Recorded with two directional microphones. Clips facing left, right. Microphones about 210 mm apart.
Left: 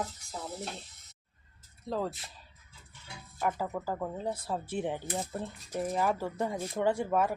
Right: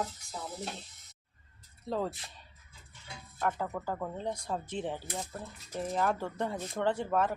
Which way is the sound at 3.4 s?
5° left (ahead or behind).